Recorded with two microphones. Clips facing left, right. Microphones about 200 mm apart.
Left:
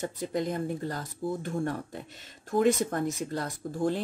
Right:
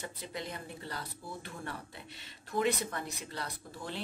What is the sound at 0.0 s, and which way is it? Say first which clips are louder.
Speech: left 11 dB; 45° left (ahead or behind).